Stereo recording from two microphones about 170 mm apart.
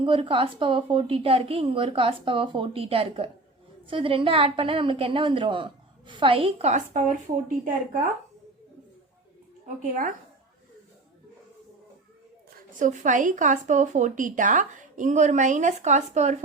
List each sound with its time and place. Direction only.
0.0 s a woman's voice: 30° right (ahead or behind); by 7.7 s 50° right (ahead or behind)
9.6 s a woman's voice: 50° right (ahead or behind)
12.5 s a woman's voice: 45° right (ahead or behind)